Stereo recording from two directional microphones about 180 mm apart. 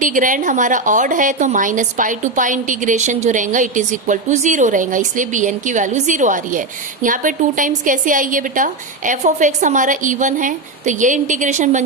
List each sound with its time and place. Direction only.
0.0 s a woman's voice: 45° right (ahead or behind)